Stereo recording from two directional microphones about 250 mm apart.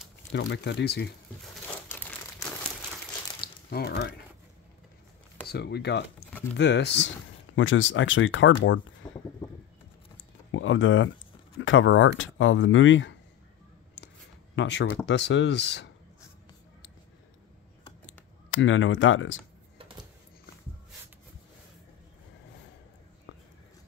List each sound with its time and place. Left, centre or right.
0.3 s speech: left
1.9 s crumpling: centre
3.3 s a sound: left
5.5 s speech: left
9.0 s a sound: centre
10.5 s speech: left
14.5 s speech: left
18.5 s speech: left